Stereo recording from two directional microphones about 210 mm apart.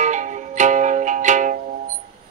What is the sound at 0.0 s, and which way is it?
Music, 35° right (ahead or behind).